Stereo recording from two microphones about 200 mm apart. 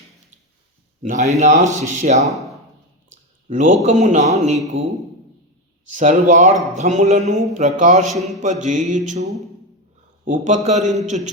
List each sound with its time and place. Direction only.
1.0 s a man's voice: 35° right (ahead or behind)
3.5 s a man's voice: 40° right (ahead or behind)
5.9 s a man's voice: 40° right (ahead or behind)
8.0 s a man's voice: centre (ahead or behind)
8.4 s a man's voice: 40° right (ahead or behind)